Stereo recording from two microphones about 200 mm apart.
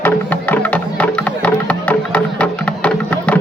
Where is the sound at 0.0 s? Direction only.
10° left (ahead or behind).